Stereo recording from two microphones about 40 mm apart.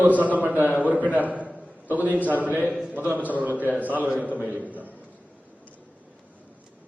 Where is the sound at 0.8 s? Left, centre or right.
Right.